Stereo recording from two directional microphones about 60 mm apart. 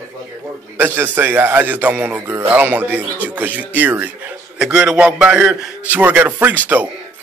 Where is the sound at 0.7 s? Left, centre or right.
Right.